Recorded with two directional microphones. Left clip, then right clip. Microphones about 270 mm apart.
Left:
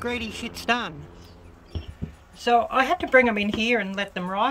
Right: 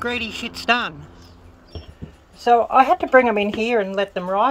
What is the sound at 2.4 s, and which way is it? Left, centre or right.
Speech, centre.